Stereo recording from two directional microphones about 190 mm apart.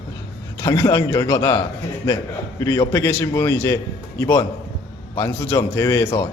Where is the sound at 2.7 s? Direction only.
15° left (ahead or behind).